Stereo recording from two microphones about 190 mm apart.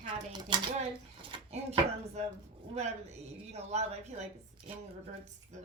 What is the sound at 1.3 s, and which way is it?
Chopping, 35° right (ahead or behind).